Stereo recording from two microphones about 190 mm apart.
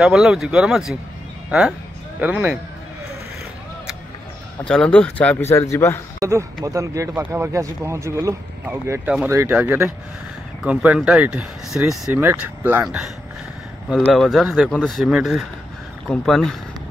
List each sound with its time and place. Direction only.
0.0 s speech: centre (ahead or behind)
4.6 s speech: 5° left (ahead or behind)
6.1 s speech: 15° right (ahead or behind); by 16.5 s centre (ahead or behind)